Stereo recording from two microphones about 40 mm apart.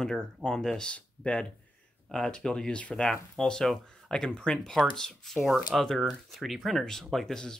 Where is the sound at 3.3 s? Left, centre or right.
Centre.